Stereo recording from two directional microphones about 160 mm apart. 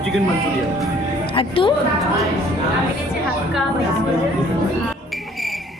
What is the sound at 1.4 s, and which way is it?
Speech, 35° left (ahead or behind).